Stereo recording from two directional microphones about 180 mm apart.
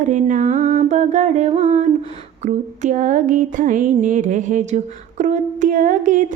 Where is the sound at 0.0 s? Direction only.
45° right (ahead or behind).